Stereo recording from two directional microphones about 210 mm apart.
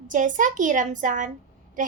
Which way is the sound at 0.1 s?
40° right (ahead or behind).